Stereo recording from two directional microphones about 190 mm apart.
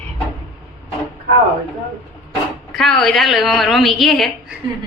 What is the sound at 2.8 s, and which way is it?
A woman's voice, centre (ahead or behind).